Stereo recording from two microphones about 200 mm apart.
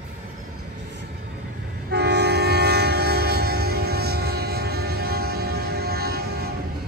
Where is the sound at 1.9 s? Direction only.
55° right (ahead or behind).